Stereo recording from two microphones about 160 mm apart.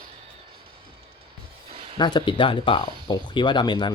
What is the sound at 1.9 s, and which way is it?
Speech, 30° left (ahead or behind).